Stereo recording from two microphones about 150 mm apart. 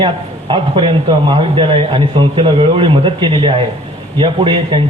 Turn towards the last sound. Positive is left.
turn(degrees=-35)  # may be behind; listen again after turning